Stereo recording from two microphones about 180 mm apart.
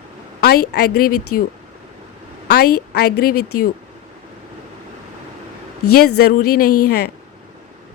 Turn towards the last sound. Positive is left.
turn(degrees=55)  # may be behind; listen again after turning